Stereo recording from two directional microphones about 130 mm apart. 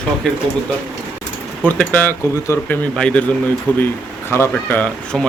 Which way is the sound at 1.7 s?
10° left (ahead or behind).